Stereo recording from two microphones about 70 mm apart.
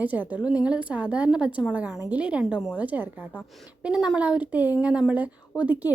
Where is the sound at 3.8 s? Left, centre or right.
Centre.